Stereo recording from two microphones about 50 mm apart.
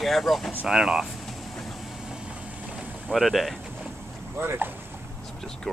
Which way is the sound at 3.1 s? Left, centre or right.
Centre.